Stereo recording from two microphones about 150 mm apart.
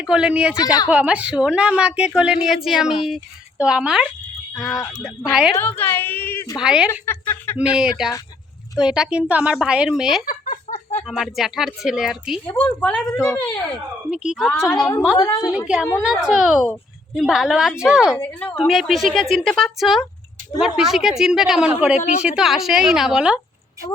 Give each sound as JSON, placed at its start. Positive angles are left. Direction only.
{"t": 0.0, "sound": "a woman's voice", "side_deg": -5}
{"t": 5.5, "sound": "a woman's voice", "side_deg": 15}
{"t": 6.6, "sound": "a woman's voice", "side_deg": -5}
{"t": 7.0, "sound": "a woman's voice", "side_deg": 15}
{"t": 7.6, "sound": "a woman's voice", "side_deg": -5}
{"t": 10.2, "sound": "a sound", "side_deg": 60}
{"t": 11.0, "sound": "a woman's voice", "side_deg": -5}
{"t": 12.5, "sound": "a woman's voice", "side_deg": 15}
{"t": 14.1, "sound": "a woman's voice", "side_deg": -5}
{"t": 14.5, "sound": "a woman's voice", "side_deg": 20}
{"t": 15.4, "sound": "a woman's voice", "side_deg": -5}
{"t": 18.2, "sound": "a woman's voice", "side_deg": 10}
{"t": 18.7, "sound": "a woman's voice", "side_deg": 0}